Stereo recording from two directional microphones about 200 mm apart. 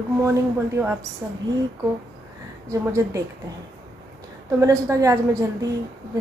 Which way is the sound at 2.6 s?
15° right (ahead or behind).